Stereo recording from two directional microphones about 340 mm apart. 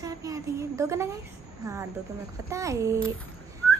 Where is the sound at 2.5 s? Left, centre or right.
Centre.